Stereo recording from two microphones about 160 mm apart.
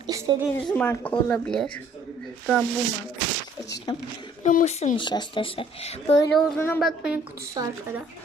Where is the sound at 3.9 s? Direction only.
25° left (ahead or behind).